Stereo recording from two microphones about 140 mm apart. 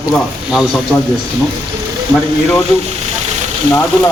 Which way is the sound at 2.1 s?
5° left (ahead or behind).